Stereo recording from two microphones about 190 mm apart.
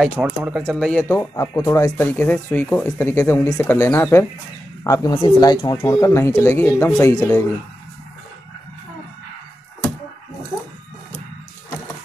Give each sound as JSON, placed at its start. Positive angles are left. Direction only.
{"t": 0.0, "sound": "speech", "side_deg": -5}
{"t": 0.7, "sound": "speech", "side_deg": 5}